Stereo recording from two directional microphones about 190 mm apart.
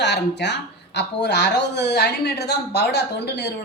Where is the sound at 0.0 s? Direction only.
65° left (ahead or behind).